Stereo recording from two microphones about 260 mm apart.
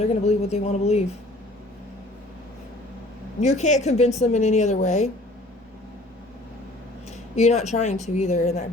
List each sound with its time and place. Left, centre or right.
0.0 s speech: left
3.4 s speech: left
7.3 s speech: left